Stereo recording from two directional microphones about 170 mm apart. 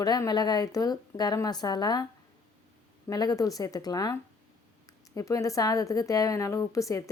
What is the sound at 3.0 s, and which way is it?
Speech, 20° left (ahead or behind).